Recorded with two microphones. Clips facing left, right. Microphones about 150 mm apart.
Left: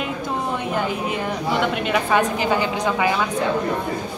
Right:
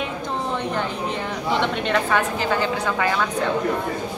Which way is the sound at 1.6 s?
10° left (ahead or behind).